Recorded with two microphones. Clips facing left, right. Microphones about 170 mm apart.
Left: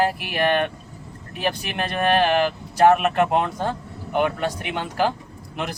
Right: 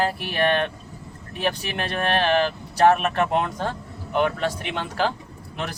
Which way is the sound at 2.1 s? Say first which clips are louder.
Even; 15° left (ahead or behind).